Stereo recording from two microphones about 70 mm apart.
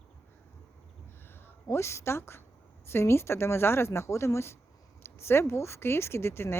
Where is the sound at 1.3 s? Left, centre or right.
Left.